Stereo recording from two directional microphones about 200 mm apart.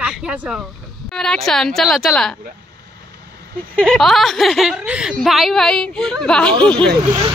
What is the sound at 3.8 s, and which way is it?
Speech, 5° left (ahead or behind).